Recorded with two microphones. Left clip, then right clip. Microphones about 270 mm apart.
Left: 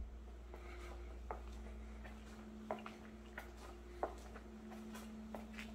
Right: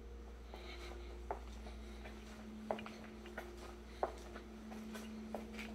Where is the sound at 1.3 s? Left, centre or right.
Right.